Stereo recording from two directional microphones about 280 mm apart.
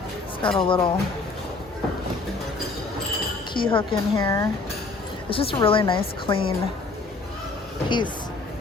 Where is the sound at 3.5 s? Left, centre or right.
Centre.